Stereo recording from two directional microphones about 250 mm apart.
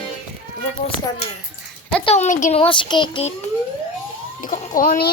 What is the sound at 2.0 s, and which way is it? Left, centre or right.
Speech, left.